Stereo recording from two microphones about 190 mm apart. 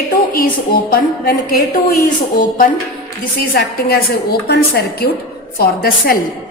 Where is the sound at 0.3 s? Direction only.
50° left (ahead or behind).